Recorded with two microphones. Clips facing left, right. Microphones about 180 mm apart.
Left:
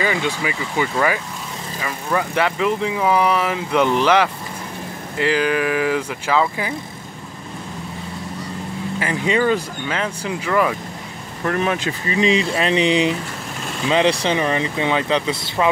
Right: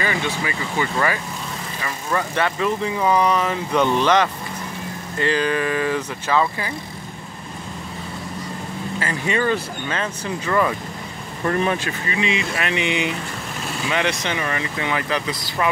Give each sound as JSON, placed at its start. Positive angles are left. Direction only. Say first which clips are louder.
{"t": 0.0, "sound": "speech", "louder": "left 3 dB", "side_deg": 15}
{"t": 5.3, "sound": "speech", "louder": "left 2 dB", "side_deg": 10}
{"t": 9.0, "sound": "speech", "louder": "left 3 dB", "side_deg": 15}
{"t": 12.1, "sound": "speech", "louder": "left 6 dB", "side_deg": 35}